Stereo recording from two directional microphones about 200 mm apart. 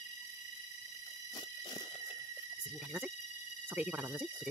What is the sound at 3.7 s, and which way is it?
Speech, 10° right (ahead or behind).